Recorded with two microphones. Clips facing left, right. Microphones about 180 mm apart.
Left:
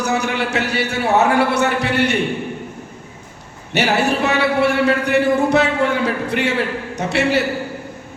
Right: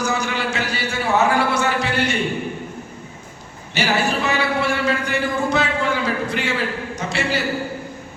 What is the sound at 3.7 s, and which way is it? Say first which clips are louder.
A man's voice: left 3 dB; 65° left (ahead or behind).